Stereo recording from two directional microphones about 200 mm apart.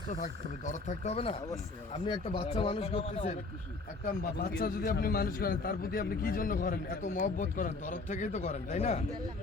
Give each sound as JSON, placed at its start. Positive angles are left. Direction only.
{"t": 0.1, "sound": "speech", "side_deg": 40}
{"t": 4.0, "sound": "a man's voice", "side_deg": 45}